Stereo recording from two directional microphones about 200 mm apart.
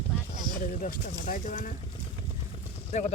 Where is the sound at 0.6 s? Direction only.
45° left (ahead or behind).